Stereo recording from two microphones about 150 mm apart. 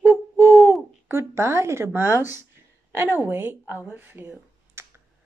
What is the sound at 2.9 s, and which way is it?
Speech, 15° right (ahead or behind).